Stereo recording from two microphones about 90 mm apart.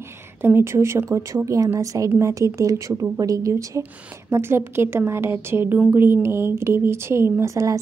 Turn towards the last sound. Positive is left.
turn(degrees=-35)  # may be behind; listen again after turning